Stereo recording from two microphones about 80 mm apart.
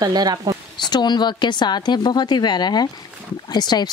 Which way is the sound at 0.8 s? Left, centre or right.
Left.